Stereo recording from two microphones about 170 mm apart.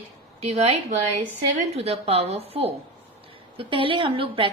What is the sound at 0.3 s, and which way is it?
A woman's voice, 40° right (ahead or behind).